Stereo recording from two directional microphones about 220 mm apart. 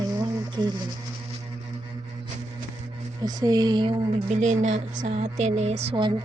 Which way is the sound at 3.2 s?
15° right (ahead or behind).